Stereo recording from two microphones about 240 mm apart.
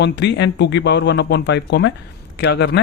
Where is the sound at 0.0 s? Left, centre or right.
Left.